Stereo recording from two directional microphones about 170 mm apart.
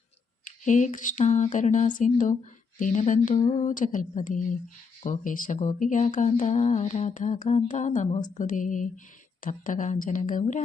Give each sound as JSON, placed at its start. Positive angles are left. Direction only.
{"t": 0.4, "sound": "speech", "side_deg": 45}